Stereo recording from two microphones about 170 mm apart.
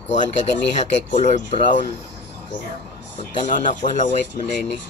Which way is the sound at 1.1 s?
40° left (ahead or behind).